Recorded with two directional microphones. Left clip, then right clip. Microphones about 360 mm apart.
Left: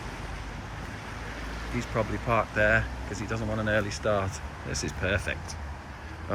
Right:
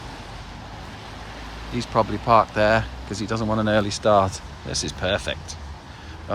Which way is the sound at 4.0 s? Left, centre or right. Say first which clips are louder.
Right 10 dB; right.